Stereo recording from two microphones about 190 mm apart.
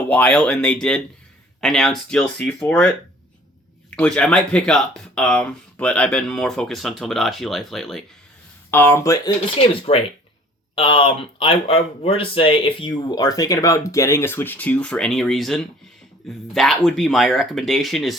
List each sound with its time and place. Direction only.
0.1 s speech: 5° left (ahead or behind)
3.9 s speech: 5° left (ahead or behind)
8.7 s speech: 10° left (ahead or behind)
9.6 s speech: 30° left (ahead or behind); by 18.2 s centre (ahead or behind)